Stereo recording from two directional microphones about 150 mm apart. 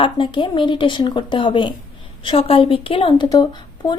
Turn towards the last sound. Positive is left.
turn(degrees=30)  # may be behind; listen again after turning